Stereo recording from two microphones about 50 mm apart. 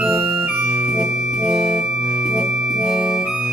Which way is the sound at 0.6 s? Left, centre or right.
Right.